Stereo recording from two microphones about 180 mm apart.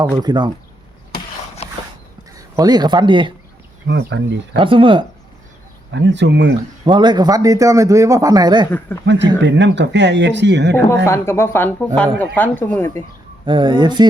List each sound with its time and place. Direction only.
0.0 s speech: 20° right (ahead or behind)
2.3 s speech: 20° right (ahead or behind)
3.8 s speech: 80° right
4.5 s speech: 30° right (ahead or behind)
5.9 s speech: 80° right
6.8 s speech: 25° right (ahead or behind)
9.1 s speech: 75° right (ahead or behind)
11.0 s speech: 15° left (ahead or behind)
13.4 s speech: 25° right (ahead or behind)